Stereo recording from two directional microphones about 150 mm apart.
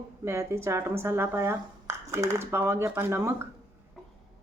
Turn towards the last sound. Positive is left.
turn(degrees=-20)  # may be behind; listen again after turning